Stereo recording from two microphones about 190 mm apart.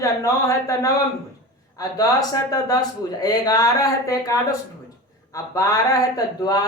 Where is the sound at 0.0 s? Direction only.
15° left (ahead or behind).